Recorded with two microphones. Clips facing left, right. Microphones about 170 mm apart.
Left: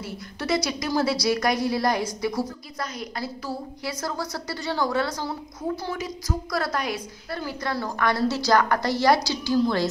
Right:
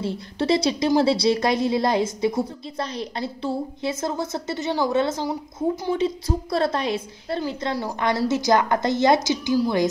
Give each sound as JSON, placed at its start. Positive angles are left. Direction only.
{"t": 0.0, "sound": "a woman's voice", "side_deg": -30}